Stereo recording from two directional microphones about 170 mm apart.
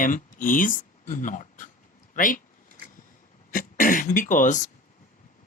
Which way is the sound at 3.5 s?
50° left (ahead or behind).